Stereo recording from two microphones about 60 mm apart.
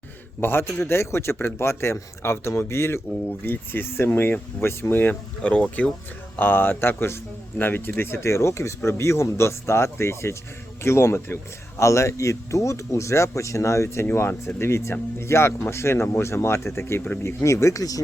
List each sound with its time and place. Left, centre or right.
0.4 s speech: left
5.4 s speech: left
6.4 s speech: left